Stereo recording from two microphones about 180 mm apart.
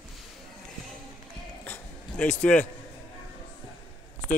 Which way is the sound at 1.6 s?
10° left (ahead or behind).